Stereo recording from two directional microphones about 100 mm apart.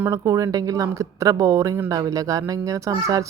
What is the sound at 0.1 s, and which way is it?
Speech, 35° right (ahead or behind).